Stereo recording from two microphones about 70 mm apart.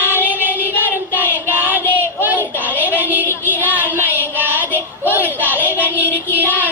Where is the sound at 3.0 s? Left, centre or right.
Left.